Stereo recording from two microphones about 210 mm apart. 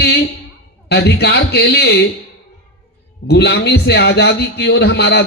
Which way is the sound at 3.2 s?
50° left (ahead or behind).